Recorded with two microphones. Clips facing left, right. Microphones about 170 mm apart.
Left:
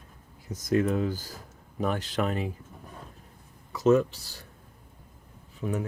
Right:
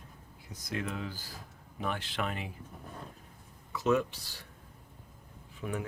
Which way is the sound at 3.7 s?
40° left (ahead or behind).